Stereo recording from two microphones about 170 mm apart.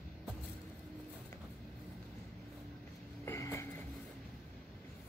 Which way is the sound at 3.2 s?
15° left (ahead or behind).